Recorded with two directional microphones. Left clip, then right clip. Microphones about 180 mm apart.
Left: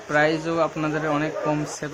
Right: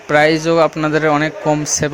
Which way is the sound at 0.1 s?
30° right (ahead or behind).